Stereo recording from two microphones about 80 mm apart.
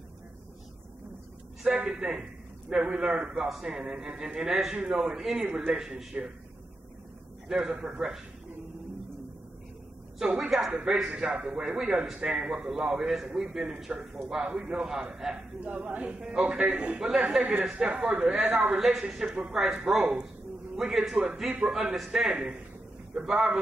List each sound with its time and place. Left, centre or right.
1.6 s a man's voice: centre
7.4 s a man's voice: centre
10.1 s a man's voice: centre